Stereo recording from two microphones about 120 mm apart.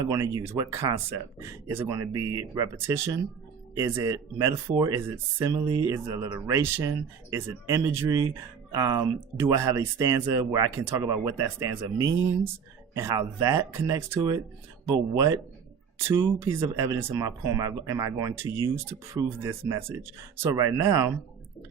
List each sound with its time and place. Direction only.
0.0 s speech: 30° right (ahead or behind)